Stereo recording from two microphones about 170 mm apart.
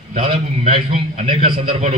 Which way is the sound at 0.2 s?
35° right (ahead or behind).